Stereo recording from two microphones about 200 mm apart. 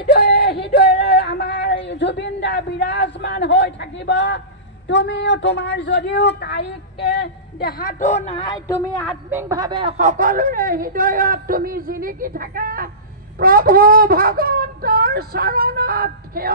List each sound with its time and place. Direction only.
0.0 s a sound: 55° left (ahead or behind)
1.9 s a woman's voice: 60° left (ahead or behind); by 8.5 s 30° left (ahead or behind)
8.6 s speech: 5° left (ahead or behind)
9.3 s speech: 15° right (ahead or behind)
9.9 s speech: 40° right (ahead or behind)